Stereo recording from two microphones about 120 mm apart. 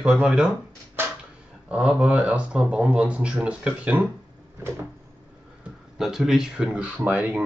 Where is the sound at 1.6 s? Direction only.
10° right (ahead or behind).